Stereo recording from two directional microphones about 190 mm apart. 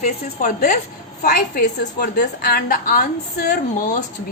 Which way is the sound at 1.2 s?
55° left (ahead or behind).